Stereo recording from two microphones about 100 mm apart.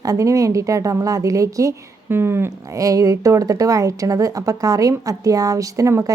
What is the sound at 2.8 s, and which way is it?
A woman's voice, 35° right (ahead or behind).